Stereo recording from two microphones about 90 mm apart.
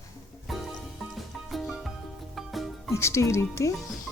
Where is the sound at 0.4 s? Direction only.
Centre (ahead or behind).